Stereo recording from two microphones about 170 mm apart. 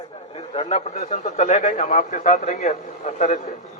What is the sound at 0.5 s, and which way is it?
A man's voice, 35° left (ahead or behind).